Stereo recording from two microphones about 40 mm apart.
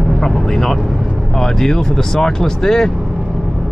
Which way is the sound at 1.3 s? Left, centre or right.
Centre.